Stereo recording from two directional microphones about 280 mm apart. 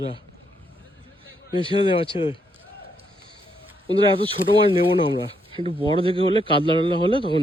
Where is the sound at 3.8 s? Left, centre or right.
Centre.